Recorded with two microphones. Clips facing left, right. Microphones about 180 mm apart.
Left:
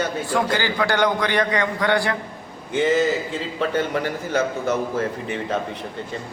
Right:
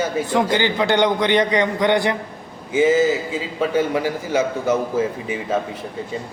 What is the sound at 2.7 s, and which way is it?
A man's voice, 10° right (ahead or behind).